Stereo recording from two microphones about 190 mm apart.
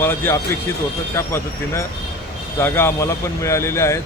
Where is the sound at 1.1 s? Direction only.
15° left (ahead or behind).